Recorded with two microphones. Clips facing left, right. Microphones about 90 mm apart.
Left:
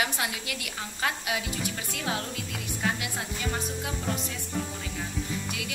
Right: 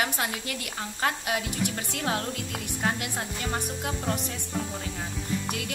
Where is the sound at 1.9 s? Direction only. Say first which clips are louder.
Right 2 dB; 45° right (ahead or behind).